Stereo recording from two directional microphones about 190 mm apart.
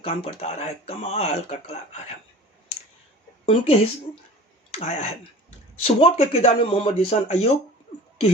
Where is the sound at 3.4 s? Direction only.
30° left (ahead or behind).